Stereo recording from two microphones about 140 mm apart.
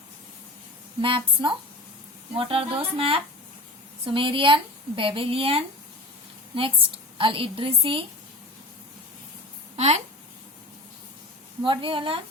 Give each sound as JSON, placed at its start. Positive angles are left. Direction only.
{"t": 1.0, "sound": "a woman's voice", "side_deg": -35}
{"t": 9.7, "sound": "speech", "side_deg": -50}
{"t": 11.6, "sound": "a woman's voice", "side_deg": -35}